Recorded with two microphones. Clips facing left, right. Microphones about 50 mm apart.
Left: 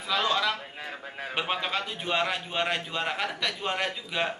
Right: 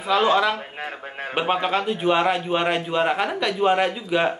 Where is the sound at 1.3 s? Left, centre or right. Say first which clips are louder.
Right 8 dB; right.